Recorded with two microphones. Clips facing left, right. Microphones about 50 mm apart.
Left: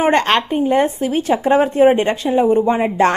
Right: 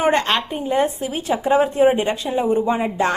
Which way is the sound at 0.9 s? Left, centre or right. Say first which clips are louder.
Left 5 dB; left.